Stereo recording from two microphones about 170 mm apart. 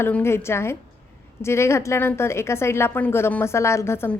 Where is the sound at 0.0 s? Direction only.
15° left (ahead or behind).